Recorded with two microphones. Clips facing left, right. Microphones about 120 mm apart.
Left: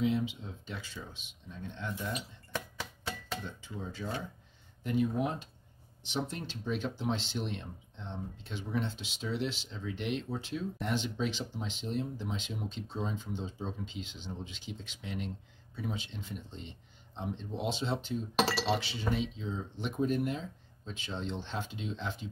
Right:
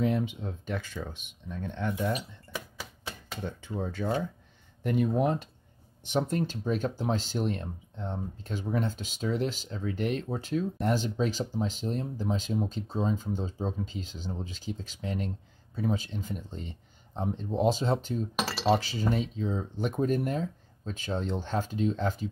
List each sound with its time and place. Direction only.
0.0 s speech: 55° right (ahead or behind)
2.5 s a sound: 10° right (ahead or behind)
3.4 s speech: 55° right (ahead or behind)
6.0 s speech: 50° right (ahead or behind)